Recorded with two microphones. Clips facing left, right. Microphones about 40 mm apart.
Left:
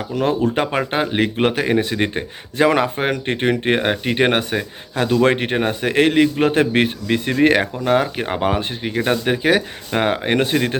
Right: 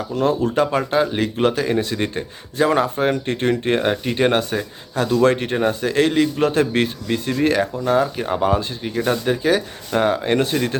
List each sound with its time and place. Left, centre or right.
0.1 s speech: left
2.6 s speech: left
2.9 s speech: left